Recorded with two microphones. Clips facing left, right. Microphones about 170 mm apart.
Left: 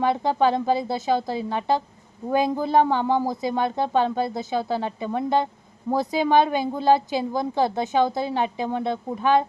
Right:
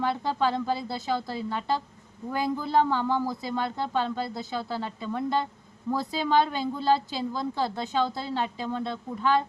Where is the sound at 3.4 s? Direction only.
20° left (ahead or behind).